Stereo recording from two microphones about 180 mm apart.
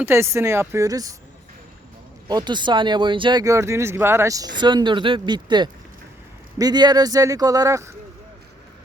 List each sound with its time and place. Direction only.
0.0 s speech: 15° right (ahead or behind)
2.2 s speech: 25° right (ahead or behind)